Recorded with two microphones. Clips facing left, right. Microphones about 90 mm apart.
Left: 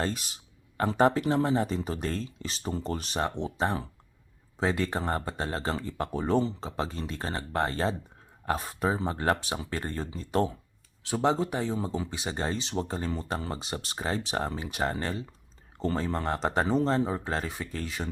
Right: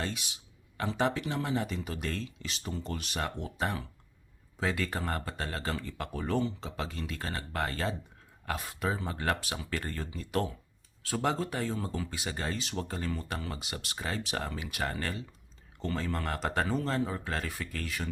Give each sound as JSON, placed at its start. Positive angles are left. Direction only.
{"t": 0.0, "sound": "speech", "side_deg": 40}